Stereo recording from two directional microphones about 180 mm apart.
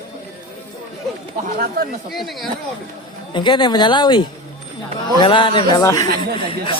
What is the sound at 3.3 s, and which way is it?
Speech, 25° left (ahead or behind).